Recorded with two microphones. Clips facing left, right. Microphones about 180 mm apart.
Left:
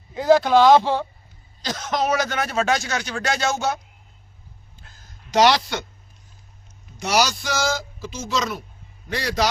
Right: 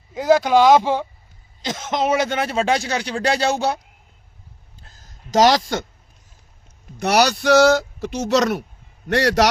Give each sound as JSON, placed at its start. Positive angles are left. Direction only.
{"t": 0.1, "sound": "speech", "side_deg": -10}
{"t": 1.6, "sound": "a man's voice", "side_deg": -25}
{"t": 4.8, "sound": "a sound", "side_deg": -35}
{"t": 6.9, "sound": "speech", "side_deg": -60}